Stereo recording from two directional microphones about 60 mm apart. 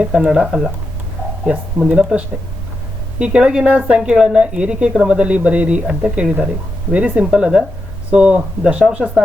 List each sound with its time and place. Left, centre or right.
0.0 s a woman's voice: centre
2.0 s a woman's voice: centre